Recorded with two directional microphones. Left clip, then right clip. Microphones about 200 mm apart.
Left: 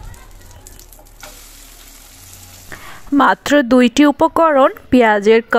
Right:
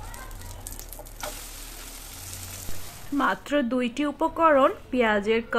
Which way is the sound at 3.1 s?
50° left (ahead or behind).